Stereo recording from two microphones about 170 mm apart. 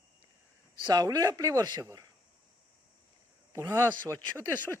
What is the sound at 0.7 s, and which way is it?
Speech, 25° right (ahead or behind).